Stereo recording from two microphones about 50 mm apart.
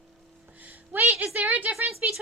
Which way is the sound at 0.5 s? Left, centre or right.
Right.